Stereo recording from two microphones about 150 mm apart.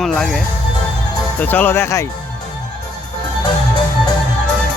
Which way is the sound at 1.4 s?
10° left (ahead or behind).